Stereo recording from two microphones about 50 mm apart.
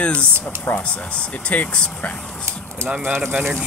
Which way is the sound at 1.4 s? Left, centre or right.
Left.